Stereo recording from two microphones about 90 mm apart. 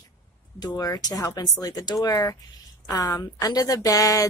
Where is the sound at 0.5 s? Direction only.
45° left (ahead or behind).